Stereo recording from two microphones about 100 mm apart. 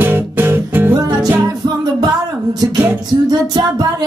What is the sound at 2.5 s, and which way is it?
Music, 45° right (ahead or behind).